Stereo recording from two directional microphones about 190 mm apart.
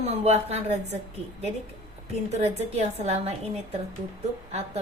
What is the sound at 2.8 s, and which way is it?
A woman's voice, 35° right (ahead or behind).